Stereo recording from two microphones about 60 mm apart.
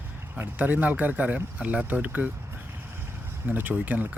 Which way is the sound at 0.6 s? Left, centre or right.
Right.